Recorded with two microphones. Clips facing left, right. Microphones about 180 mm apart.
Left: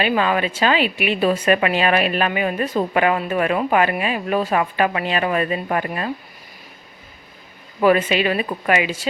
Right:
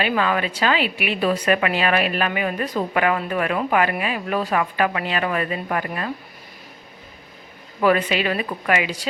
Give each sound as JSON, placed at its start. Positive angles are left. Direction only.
{"t": 0.0, "sound": "speech", "side_deg": 20}
{"t": 7.8, "sound": "speech", "side_deg": 20}